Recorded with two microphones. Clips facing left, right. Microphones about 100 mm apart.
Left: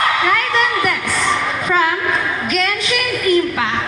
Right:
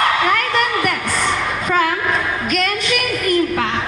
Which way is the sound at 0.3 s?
50° right (ahead or behind).